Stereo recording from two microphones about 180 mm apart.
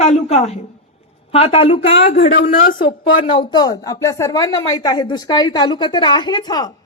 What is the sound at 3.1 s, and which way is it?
A woman's voice, 25° left (ahead or behind).